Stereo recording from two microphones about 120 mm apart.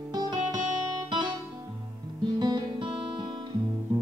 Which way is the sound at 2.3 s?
35° right (ahead or behind).